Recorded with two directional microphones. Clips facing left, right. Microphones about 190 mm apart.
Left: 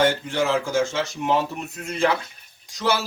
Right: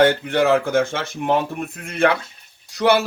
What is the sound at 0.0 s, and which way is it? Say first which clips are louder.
Speech: right 5 dB; 60° right (ahead or behind).